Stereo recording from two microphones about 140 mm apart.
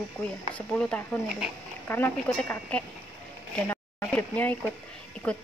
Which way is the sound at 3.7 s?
10° left (ahead or behind).